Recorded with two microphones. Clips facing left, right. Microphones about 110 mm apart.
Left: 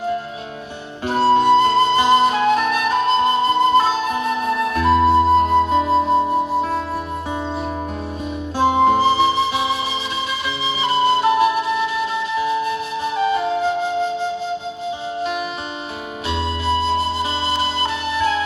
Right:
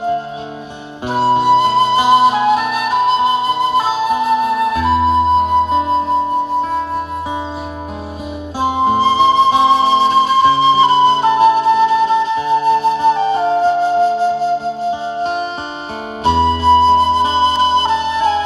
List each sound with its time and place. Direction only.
1.0 s flute: 15° right (ahead or behind); by 6.1 s centre (ahead or behind)
8.5 s flute: 15° right (ahead or behind)